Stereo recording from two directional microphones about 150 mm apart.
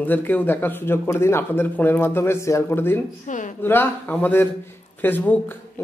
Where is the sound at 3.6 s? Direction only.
15° left (ahead or behind).